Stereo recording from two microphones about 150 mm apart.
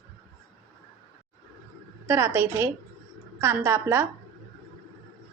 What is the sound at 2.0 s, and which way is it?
A woman's voice, 15° right (ahead or behind).